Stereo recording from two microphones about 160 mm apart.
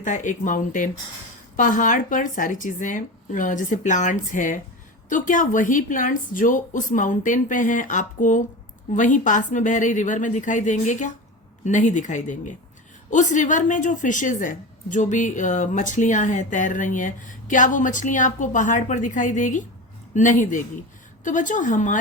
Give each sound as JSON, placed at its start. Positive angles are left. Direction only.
{"t": 0.0, "sound": "a woman's voice", "side_deg": 50}